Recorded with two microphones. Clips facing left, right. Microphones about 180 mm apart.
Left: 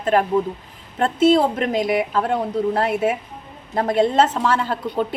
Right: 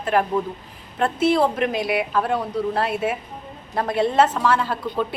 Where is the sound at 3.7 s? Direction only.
45° left (ahead or behind).